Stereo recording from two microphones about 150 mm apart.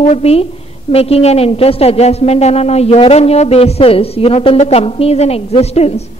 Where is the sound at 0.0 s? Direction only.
45° left (ahead or behind).